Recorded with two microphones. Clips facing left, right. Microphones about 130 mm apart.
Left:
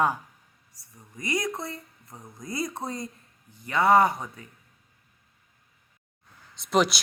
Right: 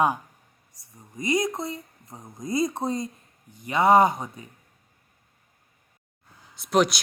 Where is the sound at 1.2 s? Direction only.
20° right (ahead or behind).